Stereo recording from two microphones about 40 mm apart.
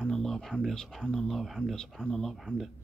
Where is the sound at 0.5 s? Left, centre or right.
Centre.